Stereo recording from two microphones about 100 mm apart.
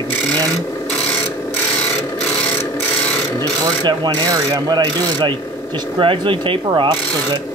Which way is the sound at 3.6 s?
45° right (ahead or behind).